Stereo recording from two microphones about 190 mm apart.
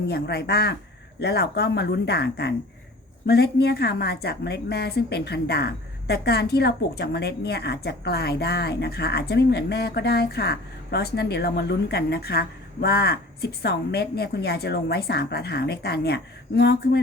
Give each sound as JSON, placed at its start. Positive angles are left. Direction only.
{"t": 0.1, "sound": "a woman's voice", "side_deg": 60}